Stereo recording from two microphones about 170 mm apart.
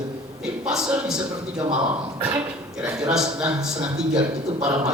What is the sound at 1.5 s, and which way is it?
Speech, 25° right (ahead or behind).